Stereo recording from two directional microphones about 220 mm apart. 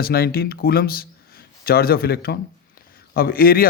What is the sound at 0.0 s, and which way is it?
Speech, 45° left (ahead or behind).